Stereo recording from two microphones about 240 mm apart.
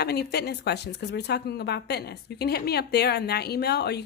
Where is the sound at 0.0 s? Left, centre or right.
Left.